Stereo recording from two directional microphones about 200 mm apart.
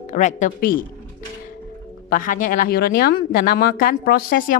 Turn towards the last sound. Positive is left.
turn(degrees=45)  # may be behind; listen again after turning